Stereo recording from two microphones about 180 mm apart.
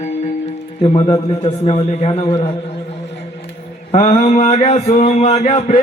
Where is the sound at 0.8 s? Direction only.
35° left (ahead or behind).